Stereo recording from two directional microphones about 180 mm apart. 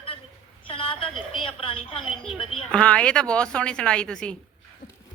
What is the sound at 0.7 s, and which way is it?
A woman's voice, 30° left (ahead or behind).